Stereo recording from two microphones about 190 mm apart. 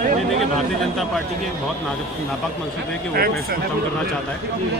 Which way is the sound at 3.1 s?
50° right (ahead or behind).